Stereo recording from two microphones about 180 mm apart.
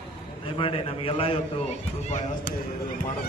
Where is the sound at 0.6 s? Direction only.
30° left (ahead or behind).